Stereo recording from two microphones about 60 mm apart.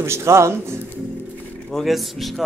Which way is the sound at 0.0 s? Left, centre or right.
Right.